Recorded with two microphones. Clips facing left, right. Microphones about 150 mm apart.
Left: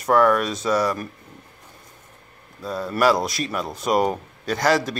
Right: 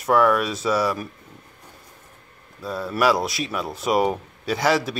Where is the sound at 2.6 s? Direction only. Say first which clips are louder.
Left 1 dB; centre (ahead or behind).